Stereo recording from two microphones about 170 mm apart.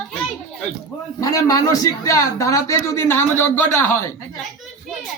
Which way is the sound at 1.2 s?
20° left (ahead or behind).